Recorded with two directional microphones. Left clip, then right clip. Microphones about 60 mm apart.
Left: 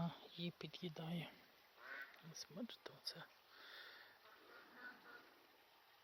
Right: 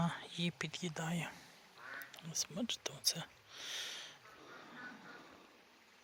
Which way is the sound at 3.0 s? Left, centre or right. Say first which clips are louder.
Right 14 dB; centre.